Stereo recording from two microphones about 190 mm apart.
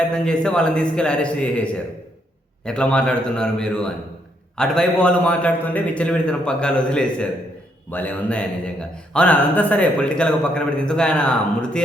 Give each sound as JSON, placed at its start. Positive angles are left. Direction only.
{"t": 0.1, "sound": "a man's voice", "side_deg": 5}